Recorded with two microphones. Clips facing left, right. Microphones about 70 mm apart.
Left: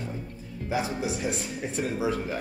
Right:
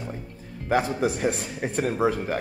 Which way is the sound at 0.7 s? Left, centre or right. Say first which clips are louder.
Right 6 dB; right.